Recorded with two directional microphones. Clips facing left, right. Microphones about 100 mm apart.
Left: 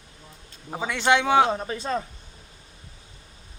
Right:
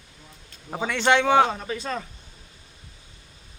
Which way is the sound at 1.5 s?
30° left (ahead or behind).